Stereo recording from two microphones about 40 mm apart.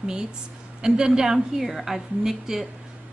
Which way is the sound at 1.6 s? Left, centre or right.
Centre.